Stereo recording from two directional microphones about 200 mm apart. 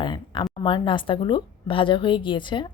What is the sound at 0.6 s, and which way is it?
Speech, 25° left (ahead or behind).